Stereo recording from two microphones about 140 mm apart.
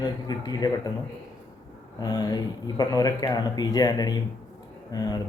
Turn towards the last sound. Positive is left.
turn(degrees=25)  # may be behind; listen again after turning